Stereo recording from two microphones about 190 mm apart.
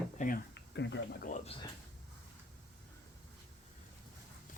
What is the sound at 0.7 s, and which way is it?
Speech, 70° left (ahead or behind).